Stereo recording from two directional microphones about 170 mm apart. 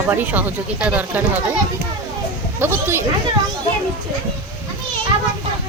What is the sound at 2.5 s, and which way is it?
Speech, 15° right (ahead or behind).